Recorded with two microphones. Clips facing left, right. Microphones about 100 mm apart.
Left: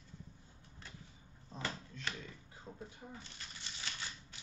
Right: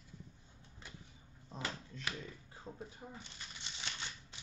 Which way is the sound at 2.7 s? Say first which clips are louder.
Right 1 dB; 25° right (ahead or behind).